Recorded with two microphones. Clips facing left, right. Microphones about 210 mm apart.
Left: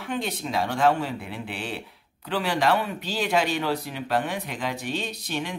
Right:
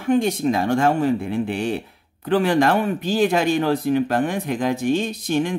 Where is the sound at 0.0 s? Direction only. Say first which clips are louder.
Right 11 dB; 45° right (ahead or behind).